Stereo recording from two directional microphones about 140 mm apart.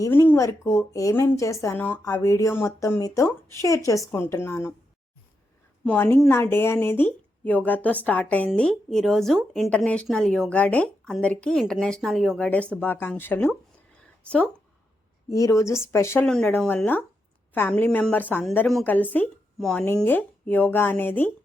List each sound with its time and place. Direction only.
0.0 s speech: 20° left (ahead or behind)
5.8 s a woman's voice: 10° left (ahead or behind)
15.3 s speech: 25° left (ahead or behind)
16.2 s a woman's voice: 5° left (ahead or behind)